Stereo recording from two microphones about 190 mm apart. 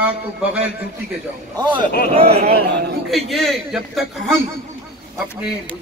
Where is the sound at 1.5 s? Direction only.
25° right (ahead or behind).